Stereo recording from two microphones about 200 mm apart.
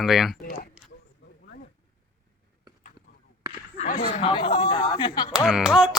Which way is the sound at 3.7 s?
35° left (ahead or behind).